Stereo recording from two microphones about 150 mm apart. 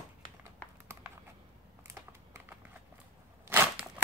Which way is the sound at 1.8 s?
20° right (ahead or behind).